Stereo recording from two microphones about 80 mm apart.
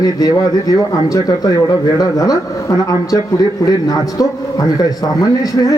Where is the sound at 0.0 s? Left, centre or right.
Left.